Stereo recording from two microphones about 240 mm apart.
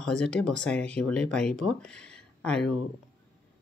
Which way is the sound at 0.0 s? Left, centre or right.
Centre.